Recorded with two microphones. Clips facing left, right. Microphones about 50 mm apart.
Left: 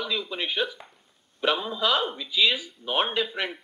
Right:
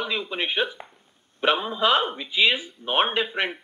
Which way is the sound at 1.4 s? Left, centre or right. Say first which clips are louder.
Right 3 dB; right.